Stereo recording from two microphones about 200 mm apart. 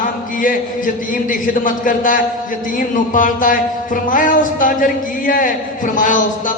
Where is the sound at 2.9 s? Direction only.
40° left (ahead or behind).